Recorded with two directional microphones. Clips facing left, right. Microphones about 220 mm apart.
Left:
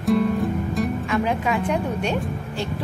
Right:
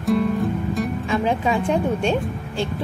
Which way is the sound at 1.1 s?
30° right (ahead or behind).